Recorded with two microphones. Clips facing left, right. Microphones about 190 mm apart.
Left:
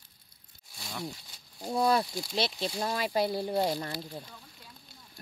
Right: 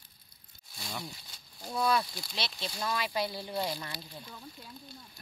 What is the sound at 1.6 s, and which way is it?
Speech, 35° left (ahead or behind).